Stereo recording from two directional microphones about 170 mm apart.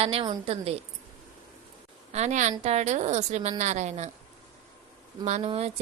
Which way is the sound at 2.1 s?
40° right (ahead or behind).